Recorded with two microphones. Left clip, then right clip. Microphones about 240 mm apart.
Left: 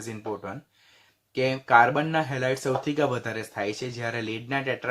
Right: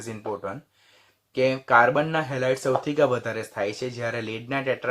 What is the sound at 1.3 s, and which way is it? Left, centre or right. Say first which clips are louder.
Speech: right 1 dB; centre.